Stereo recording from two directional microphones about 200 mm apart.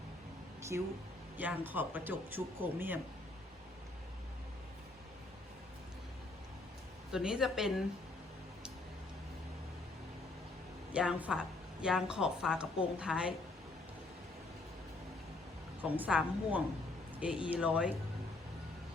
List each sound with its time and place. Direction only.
0.7 s speech: 60° right (ahead or behind)
1.4 s speech: 10° right (ahead or behind)
7.1 s a woman's voice: 5° right (ahead or behind)
10.9 s a woman's voice: 5° right (ahead or behind)
15.8 s a woman's voice: 5° right (ahead or behind)